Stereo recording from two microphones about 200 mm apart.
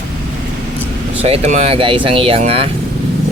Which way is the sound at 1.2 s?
30° right (ahead or behind).